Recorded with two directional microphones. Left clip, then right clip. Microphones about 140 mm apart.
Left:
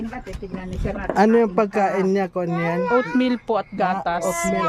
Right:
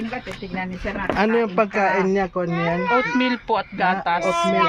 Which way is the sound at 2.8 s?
90° left.